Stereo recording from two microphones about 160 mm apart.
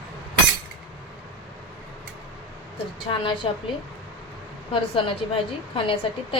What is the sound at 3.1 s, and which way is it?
Speech, 30° left (ahead or behind).